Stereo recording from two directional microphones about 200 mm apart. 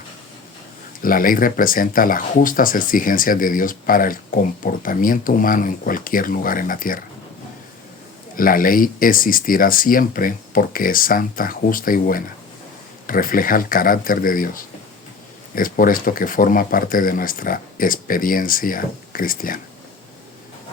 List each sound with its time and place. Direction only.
1.0 s speech: 45° left (ahead or behind)
8.4 s speech: 45° left (ahead or behind)